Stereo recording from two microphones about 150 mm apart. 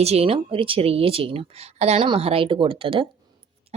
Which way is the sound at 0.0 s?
45° right (ahead or behind).